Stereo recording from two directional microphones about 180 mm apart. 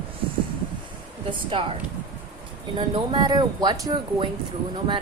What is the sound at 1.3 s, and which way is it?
Speech, 30° right (ahead or behind).